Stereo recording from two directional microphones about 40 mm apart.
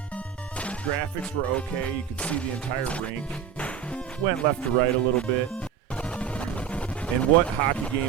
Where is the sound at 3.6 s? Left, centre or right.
Left.